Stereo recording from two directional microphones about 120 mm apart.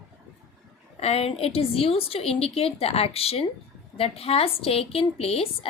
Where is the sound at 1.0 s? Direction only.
60° left (ahead or behind).